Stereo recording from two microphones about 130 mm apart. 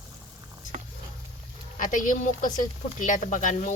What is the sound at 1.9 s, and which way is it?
Speech, 90° left.